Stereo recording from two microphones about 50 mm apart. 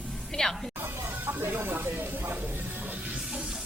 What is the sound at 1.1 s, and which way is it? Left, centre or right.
Music, right.